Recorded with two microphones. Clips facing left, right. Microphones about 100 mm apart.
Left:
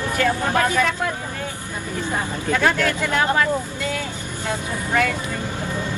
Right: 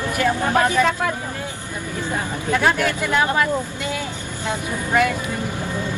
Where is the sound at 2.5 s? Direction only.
15° right (ahead or behind).